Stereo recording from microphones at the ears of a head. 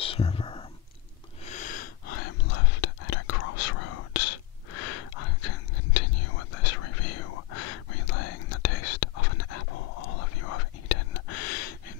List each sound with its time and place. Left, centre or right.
1.4 s whispering: left